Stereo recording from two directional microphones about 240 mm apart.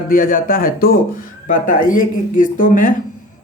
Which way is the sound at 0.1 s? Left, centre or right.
Left.